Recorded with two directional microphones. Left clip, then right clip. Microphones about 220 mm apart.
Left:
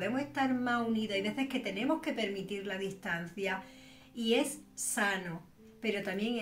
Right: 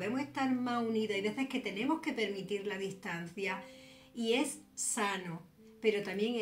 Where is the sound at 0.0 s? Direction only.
10° left (ahead or behind).